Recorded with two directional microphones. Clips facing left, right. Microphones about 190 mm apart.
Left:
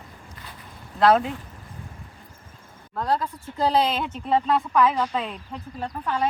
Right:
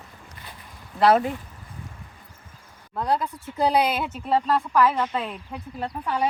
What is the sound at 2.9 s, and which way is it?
Speech, 15° right (ahead or behind).